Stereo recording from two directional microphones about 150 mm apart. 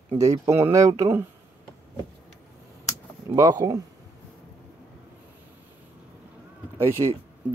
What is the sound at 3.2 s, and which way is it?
Speech, 25° right (ahead or behind).